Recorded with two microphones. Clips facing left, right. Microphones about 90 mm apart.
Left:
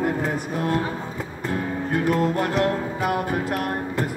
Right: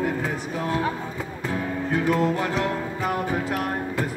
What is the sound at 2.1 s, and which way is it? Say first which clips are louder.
Music: left 1 dB; 50° left (ahead or behind).